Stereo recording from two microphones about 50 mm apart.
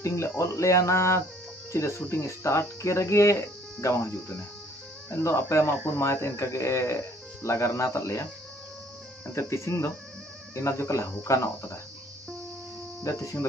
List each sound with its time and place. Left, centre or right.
0.0 s speech: left
3.8 s speech: left
5.2 s speech: left
9.3 s speech: left
13.1 s speech: left